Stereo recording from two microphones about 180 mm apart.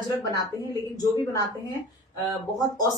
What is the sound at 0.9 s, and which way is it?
Speech, 20° left (ahead or behind).